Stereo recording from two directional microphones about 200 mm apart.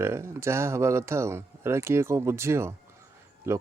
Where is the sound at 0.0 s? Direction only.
10° right (ahead or behind).